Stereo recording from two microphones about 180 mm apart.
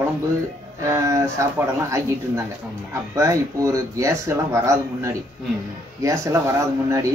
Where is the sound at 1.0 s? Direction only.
15° right (ahead or behind).